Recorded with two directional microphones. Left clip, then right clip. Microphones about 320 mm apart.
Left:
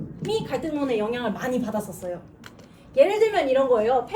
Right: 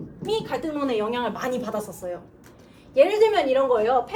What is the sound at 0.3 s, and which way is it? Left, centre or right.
A woman's voice, centre.